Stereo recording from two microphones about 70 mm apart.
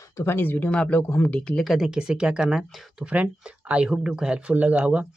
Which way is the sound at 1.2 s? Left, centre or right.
Centre.